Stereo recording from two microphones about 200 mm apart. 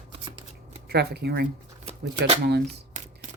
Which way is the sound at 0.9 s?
55° right (ahead or behind).